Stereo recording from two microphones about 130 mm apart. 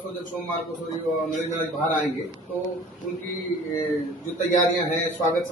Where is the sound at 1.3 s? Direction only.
75° left (ahead or behind).